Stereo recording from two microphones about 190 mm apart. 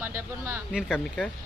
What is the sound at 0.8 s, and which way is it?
Speech, 5° left (ahead or behind).